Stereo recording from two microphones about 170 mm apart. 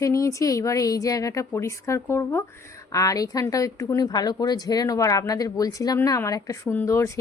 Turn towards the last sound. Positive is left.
turn(degrees=15)  # may be behind; listen again after turning